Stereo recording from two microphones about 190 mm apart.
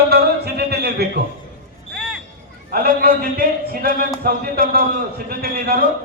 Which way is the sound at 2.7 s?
50° right (ahead or behind).